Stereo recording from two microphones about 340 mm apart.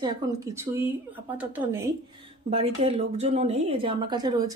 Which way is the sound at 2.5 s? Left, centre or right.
Centre.